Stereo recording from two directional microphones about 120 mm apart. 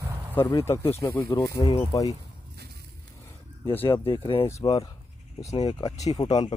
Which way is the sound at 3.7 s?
15° left (ahead or behind).